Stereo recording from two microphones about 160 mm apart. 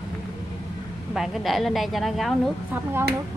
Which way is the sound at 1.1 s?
Centre (ahead or behind).